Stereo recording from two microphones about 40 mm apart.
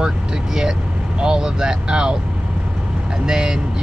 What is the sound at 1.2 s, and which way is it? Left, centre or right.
Speech, centre.